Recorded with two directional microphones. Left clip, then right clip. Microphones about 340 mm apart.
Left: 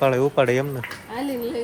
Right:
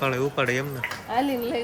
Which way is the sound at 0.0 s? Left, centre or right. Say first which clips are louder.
Left 6 dB; centre.